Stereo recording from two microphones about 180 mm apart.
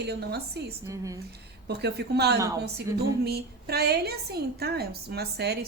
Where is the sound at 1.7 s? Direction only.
70° right (ahead or behind).